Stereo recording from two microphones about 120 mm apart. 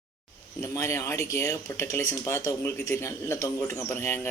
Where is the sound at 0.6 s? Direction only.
25° left (ahead or behind).